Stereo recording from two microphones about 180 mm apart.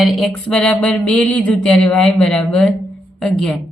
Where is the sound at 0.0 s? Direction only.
Centre (ahead or behind).